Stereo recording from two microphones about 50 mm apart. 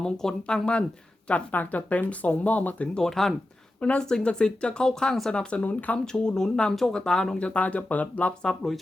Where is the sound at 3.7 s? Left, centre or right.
Left.